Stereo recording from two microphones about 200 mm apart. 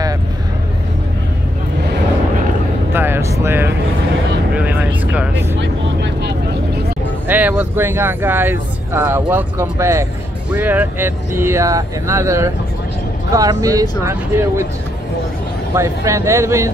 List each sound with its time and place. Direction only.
2.9 s vehicle: 10° right (ahead or behind)
4.6 s speech: 10° right (ahead or behind)
5.6 s speech: 60° right (ahead or behind)
7.2 s speech: 10° right (ahead or behind)
15.7 s speech: 15° right (ahead or behind)